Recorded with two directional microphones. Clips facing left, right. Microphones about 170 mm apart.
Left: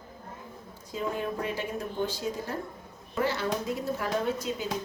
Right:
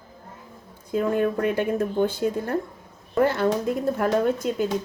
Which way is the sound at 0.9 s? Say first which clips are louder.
Right 9 dB; 55° right (ahead or behind).